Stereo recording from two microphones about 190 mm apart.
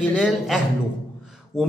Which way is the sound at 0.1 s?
Centre (ahead or behind).